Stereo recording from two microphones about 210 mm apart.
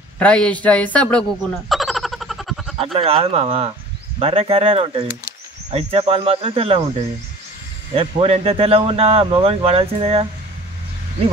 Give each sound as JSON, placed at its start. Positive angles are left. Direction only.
{"t": 0.2, "sound": "a man's voice", "side_deg": 5}
{"t": 1.7, "sound": "a sound", "side_deg": 0}
{"t": 2.8, "sound": "speech", "side_deg": -25}
{"t": 7.9, "sound": "speech", "side_deg": -25}